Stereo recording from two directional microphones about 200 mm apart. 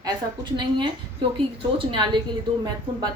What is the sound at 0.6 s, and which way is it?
A woman's voice, 25° right (ahead or behind).